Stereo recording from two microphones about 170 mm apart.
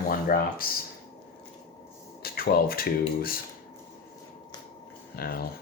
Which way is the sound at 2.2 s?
60° left (ahead or behind).